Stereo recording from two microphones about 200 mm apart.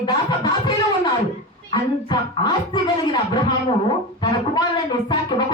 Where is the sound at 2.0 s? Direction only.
20° left (ahead or behind).